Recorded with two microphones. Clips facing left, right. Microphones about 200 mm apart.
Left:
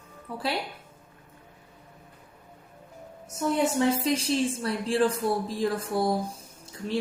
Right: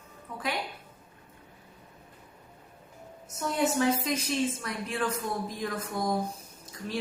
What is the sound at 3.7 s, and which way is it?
A woman's voice, 30° left (ahead or behind).